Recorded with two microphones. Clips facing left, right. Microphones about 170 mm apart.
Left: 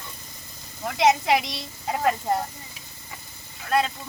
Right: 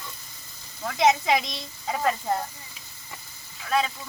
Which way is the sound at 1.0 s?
5° left (ahead or behind).